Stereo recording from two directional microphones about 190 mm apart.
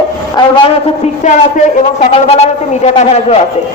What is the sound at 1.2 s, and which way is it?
Speech, 40° left (ahead or behind).